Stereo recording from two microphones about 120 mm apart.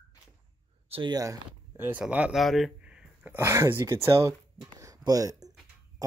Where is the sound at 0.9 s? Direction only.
45° right (ahead or behind).